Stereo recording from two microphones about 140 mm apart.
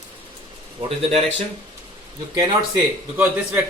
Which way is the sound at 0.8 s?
45° right (ahead or behind).